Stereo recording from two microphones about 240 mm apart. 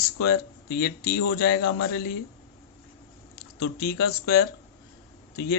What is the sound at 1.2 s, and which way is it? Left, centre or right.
Speech, left.